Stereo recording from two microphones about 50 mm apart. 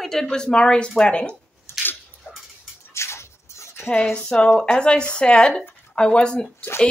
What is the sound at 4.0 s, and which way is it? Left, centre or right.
Speech, centre.